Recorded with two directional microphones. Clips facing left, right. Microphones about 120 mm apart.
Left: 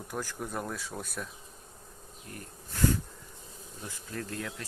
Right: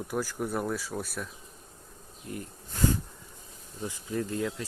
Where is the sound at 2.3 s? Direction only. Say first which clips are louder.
Right 7 dB; 20° right (ahead or behind).